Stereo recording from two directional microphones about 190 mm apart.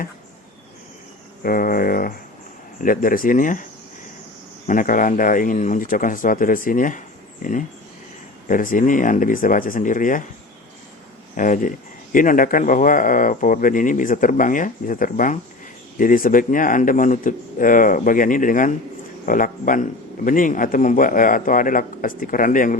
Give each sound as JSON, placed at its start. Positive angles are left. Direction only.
{"t": 1.4, "sound": "speech", "side_deg": 50}
{"t": 11.3, "sound": "speech", "side_deg": 45}